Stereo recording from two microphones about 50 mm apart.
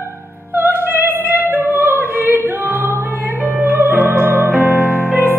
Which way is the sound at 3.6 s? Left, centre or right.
Right.